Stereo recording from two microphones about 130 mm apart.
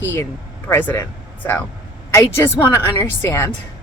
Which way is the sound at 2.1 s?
20° left (ahead or behind).